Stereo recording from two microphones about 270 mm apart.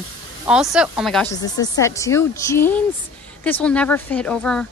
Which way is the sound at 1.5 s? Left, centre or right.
Centre.